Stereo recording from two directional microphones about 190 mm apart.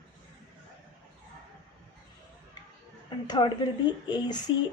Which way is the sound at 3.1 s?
20° left (ahead or behind).